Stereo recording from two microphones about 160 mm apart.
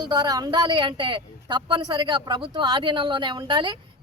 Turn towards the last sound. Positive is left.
turn(degrees=-30)  # may be behind; listen again after turning